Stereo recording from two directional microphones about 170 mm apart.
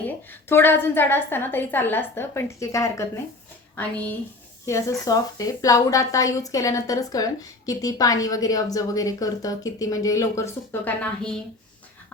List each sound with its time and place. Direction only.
0.4 s a woman's voice: 10° left (ahead or behind)
4.6 s a woman's voice: 20° left (ahead or behind)